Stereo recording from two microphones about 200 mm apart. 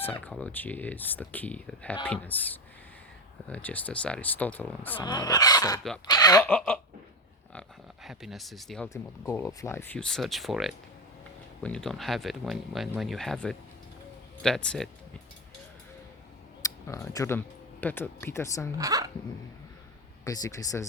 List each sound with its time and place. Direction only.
0.0 s speech: 10° left (ahead or behind)
6.5 s speech: 5° left (ahead or behind)
8.0 s speech: centre (ahead or behind)
8.9 s speech: 15° left (ahead or behind)
16.6 s speech: 15° left (ahead or behind)
18.8 s speech: 15° right (ahead or behind)
20.2 s speech: 20° left (ahead or behind)